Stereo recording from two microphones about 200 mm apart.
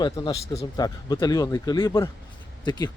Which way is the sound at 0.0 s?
20° left (ahead or behind).